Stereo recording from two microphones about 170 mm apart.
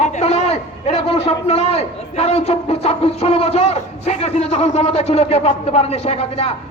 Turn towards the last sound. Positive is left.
turn(degrees=35)  # may be behind; listen again after turning